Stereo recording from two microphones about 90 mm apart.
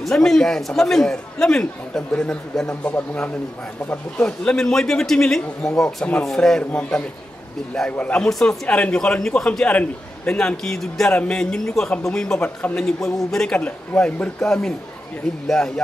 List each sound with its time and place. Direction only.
0.0 s a man's voice: 5° left (ahead or behind)
4.2 s a man's voice: 10° left (ahead or behind)